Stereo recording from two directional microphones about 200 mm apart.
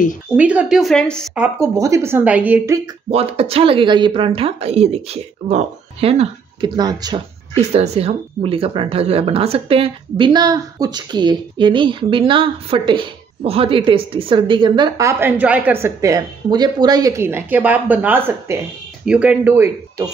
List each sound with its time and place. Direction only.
0.4 s speech: 5° right (ahead or behind)
1.3 s a woman's voice: 10° right (ahead or behind)
3.1 s speech: 30° right (ahead or behind)
7.7 s a woman's voice: 35° right (ahead or behind); by 20.1 s 10° right (ahead or behind)